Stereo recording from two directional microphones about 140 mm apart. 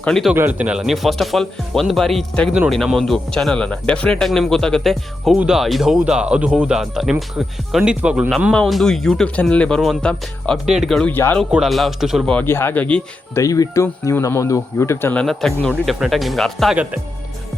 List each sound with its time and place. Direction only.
0.0 s speech: centre (ahead or behind)
0.3 s speech: 10° right (ahead or behind)
8.5 s speech: 5° left (ahead or behind)
11.1 s speech: 15° left (ahead or behind)
11.5 s speech: centre (ahead or behind)
13.4 s speech: 25° left (ahead or behind)
15.2 s speech: 5° left (ahead or behind)